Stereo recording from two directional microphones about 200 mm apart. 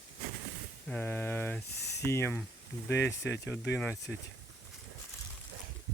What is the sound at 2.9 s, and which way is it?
Speech, 60° left (ahead or behind).